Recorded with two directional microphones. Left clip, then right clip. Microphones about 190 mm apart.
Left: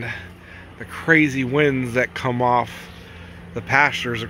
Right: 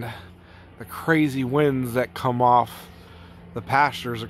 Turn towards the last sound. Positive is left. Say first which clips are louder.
# left 3 dB
turn(degrees=-20)  # may be behind; listen again after turning